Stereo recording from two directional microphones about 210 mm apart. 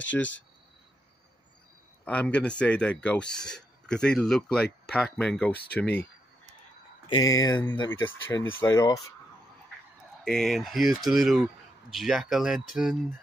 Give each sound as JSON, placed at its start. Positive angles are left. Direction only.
{"t": 2.0, "sound": "speech", "side_deg": 5}
{"t": 7.1, "sound": "speech", "side_deg": 15}
{"t": 10.2, "sound": "speech", "side_deg": 0}